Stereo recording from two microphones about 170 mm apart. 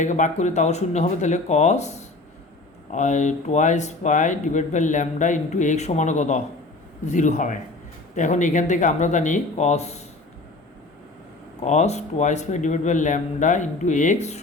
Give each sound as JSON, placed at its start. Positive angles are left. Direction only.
{"t": 0.0, "sound": "speech", "side_deg": 45}
{"t": 11.6, "sound": "speech", "side_deg": 40}